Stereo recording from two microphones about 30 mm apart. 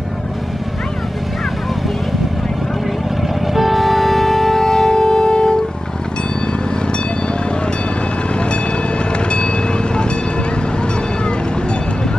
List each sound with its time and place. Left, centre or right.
3.5 s music: centre; by 5.6 s left